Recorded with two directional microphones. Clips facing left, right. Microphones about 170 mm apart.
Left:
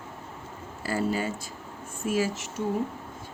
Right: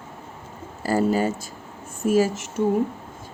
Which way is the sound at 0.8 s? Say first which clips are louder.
Right 7 dB; 40° right (ahead or behind).